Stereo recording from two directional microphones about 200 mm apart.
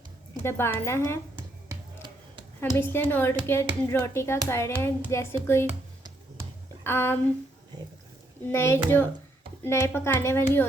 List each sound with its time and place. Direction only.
0.4 s a woman's voice: 10° left (ahead or behind)
1.4 s music: 20° right (ahead or behind)
2.6 s a woman's voice: 10° left (ahead or behind)
6.8 s a woman's voice: 10° left (ahead or behind)
8.4 s a woman's voice: 10° left (ahead or behind)